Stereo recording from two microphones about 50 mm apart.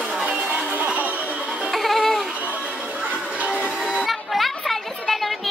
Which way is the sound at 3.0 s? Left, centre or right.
Right.